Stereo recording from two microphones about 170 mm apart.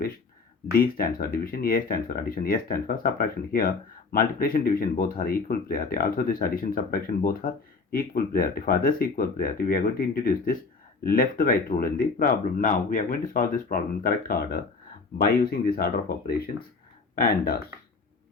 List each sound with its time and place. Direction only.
0.7 s speech: 60° left (ahead or behind)